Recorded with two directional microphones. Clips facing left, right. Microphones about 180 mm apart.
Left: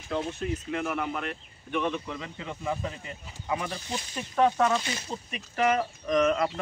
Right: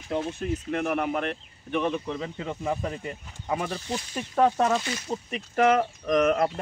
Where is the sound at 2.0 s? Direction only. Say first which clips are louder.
Right 5 dB; 35° right (ahead or behind).